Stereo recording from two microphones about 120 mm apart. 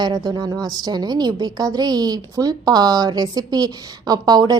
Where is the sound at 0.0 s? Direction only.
35° right (ahead or behind).